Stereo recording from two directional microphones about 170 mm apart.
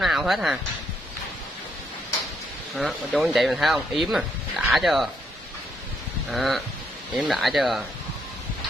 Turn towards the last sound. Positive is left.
turn(degrees=0)  # may be behind; listen again after turning